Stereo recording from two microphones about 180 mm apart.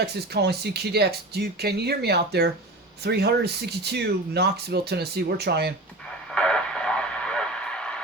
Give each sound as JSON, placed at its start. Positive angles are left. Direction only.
{"t": 0.0, "sound": "speech", "side_deg": -65}
{"t": 6.3, "sound": "radio", "side_deg": 5}